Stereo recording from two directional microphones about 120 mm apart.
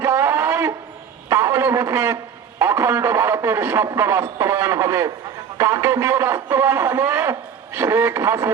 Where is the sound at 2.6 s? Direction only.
20° right (ahead or behind).